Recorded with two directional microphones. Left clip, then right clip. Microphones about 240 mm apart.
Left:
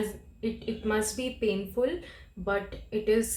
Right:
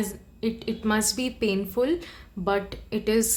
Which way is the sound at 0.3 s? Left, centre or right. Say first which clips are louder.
Right 5 dB; right.